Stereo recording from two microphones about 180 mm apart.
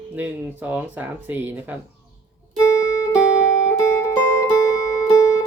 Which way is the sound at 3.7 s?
15° left (ahead or behind).